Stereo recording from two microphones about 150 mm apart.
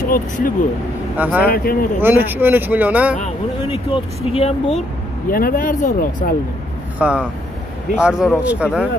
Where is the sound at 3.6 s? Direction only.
35° left (ahead or behind).